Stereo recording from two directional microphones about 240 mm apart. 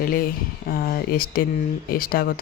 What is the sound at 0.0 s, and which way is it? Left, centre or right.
Speech, left.